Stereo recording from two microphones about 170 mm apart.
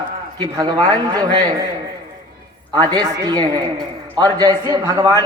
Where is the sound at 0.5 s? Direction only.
20° right (ahead or behind).